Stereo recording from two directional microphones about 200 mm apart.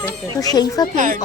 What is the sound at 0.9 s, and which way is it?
Speech, 40° right (ahead or behind).